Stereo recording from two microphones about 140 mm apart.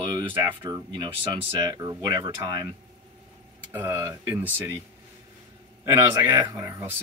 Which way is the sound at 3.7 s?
15° right (ahead or behind).